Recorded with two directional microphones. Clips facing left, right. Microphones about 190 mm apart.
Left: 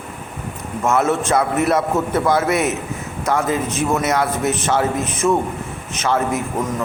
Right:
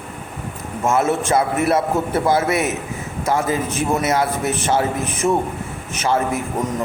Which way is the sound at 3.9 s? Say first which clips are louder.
Right 1 dB; 30° right (ahead or behind).